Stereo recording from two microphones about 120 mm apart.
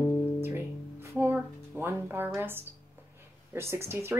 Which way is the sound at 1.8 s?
20° right (ahead or behind).